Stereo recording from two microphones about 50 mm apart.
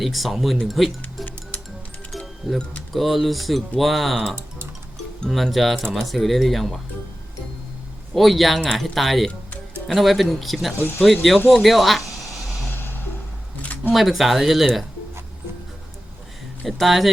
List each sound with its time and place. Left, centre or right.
0.0 s speech: centre
2.4 s speech: centre
5.3 s speech: centre
8.1 s speech: centre
11.4 s a sound: centre
12.7 s a sound: left
13.9 s speech: centre
16.6 s speech: centre